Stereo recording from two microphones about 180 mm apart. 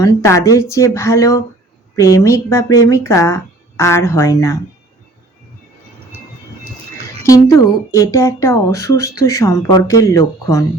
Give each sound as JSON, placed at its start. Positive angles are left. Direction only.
{"t": 0.0, "sound": "speech", "side_deg": 20}
{"t": 7.3, "sound": "speech", "side_deg": 20}